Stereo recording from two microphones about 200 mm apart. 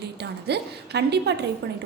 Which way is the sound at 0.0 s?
55° right (ahead or behind).